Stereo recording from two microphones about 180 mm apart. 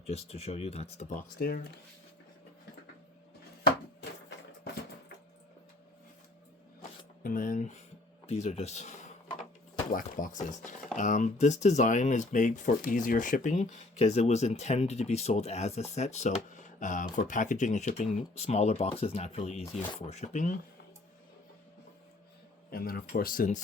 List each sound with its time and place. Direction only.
0.0 s speech: 35° left (ahead or behind)
1.4 s speech: 60° left (ahead or behind)
7.2 s speech: 50° left (ahead or behind)
22.7 s speech: 55° left (ahead or behind)